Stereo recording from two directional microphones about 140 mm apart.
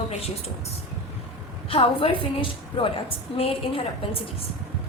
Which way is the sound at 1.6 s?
40° left (ahead or behind).